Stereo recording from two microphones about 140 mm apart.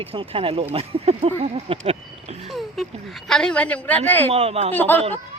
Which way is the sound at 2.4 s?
Centre (ahead or behind).